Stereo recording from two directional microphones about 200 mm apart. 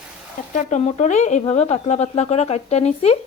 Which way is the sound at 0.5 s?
35° left (ahead or behind).